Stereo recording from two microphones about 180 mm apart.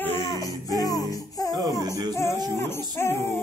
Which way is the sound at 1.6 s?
20° right (ahead or behind).